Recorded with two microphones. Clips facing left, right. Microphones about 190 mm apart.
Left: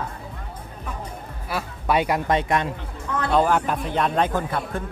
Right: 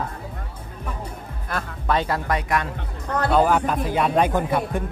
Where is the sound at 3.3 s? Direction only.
Centre (ahead or behind).